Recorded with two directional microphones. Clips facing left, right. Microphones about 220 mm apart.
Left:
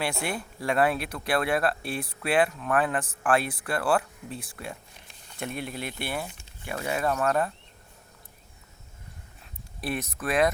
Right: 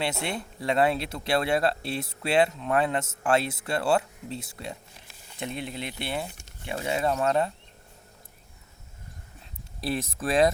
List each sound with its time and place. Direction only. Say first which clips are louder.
0.0 s speech: even; 25° right (ahead or behind)
9.8 s speech: right 2 dB; 30° right (ahead or behind)